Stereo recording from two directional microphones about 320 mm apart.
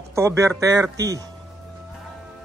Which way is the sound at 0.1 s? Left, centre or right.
Centre.